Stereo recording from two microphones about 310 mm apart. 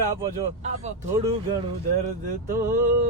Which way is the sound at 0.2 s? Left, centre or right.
Right.